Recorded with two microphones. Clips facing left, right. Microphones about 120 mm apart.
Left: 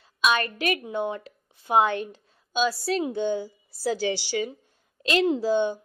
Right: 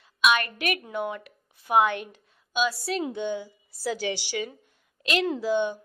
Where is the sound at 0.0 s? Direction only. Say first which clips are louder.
Even; 35° left (ahead or behind).